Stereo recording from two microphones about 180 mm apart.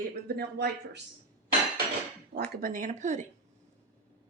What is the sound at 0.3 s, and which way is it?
Speech, 60° right (ahead or behind).